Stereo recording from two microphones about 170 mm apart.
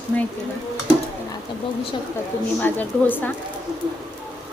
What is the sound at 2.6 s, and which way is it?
Speech, 10° left (ahead or behind).